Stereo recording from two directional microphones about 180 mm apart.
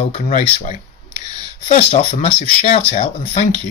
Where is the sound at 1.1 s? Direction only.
25° right (ahead or behind).